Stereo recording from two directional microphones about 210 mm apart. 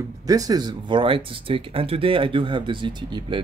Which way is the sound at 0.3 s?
15° right (ahead or behind).